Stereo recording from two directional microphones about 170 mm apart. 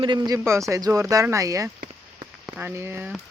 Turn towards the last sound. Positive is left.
turn(degrees=-10)  # may be behind; listen again after turning